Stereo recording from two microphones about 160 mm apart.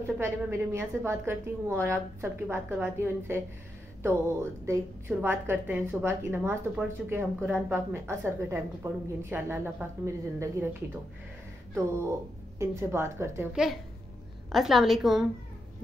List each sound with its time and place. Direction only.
0.2 s a woman's voice: 15° right (ahead or behind)
13.5 s a woman's voice: 5° right (ahead or behind)